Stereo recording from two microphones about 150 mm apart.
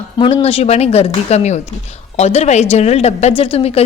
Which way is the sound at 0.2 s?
35° left (ahead or behind).